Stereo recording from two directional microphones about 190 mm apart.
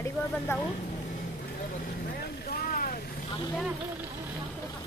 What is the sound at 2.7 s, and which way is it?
Vehicle, 50° left (ahead or behind).